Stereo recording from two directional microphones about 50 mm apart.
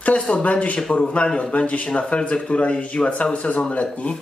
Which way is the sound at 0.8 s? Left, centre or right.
Centre.